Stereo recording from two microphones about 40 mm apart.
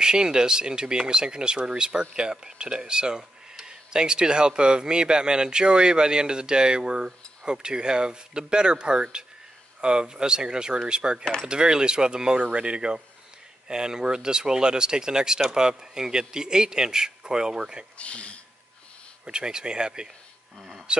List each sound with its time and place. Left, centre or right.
0.0 s speech: centre
17.9 s speech: left
19.2 s speech: centre